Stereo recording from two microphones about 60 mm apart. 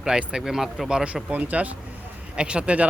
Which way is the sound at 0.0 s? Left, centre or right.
Centre.